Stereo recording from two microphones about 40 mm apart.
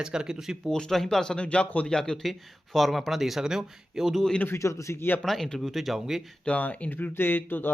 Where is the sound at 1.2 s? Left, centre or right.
Left.